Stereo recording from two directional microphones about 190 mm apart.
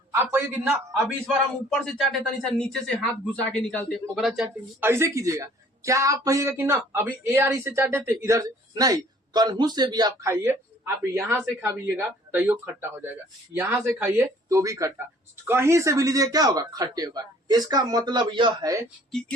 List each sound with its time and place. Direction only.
0.1 s a man's voice: 15° right (ahead or behind)
1.7 s speech: centre (ahead or behind)
4.8 s a man's voice: 15° right (ahead or behind)